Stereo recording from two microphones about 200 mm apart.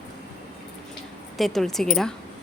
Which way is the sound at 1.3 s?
Centre (ahead or behind).